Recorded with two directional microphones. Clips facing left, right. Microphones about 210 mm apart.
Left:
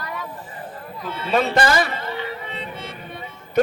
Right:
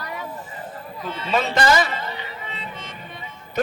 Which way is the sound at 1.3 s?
55° left (ahead or behind).